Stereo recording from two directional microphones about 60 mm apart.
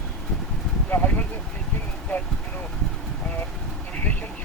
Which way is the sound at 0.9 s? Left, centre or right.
Left.